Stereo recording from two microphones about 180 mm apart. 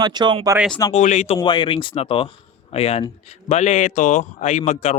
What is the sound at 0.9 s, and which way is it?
Speech, 40° left (ahead or behind).